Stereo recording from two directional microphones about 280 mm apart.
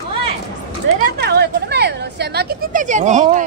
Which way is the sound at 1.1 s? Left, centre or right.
Right.